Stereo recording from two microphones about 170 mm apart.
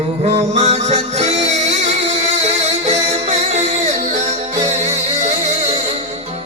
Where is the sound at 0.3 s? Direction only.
40° right (ahead or behind).